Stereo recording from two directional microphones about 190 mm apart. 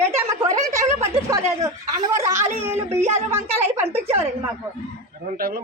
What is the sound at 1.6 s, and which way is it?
Speech, 15° right (ahead or behind).